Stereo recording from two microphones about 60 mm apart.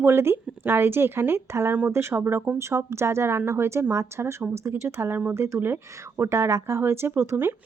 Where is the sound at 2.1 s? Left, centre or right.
Right.